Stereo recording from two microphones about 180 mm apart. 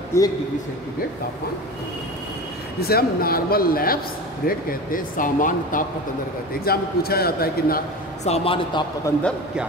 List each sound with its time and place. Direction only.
0.1 s a man's voice: 15° left (ahead or behind)
2.8 s speech: 60° left (ahead or behind)
6.6 s speech: 60° left (ahead or behind)
8.2 s a man's voice: 35° left (ahead or behind)